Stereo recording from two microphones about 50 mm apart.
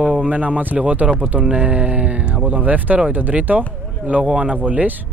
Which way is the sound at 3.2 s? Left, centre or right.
Right.